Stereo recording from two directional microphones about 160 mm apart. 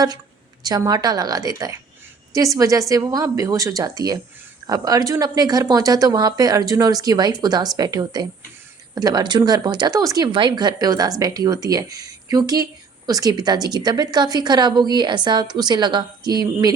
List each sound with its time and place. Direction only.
0.6 s speech: 25° right (ahead or behind)